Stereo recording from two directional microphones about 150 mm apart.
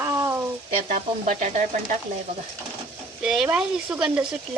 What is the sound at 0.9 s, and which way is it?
Speech, 55° right (ahead or behind).